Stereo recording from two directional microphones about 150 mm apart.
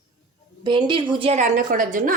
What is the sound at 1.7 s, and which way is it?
Speech, 65° right (ahead or behind).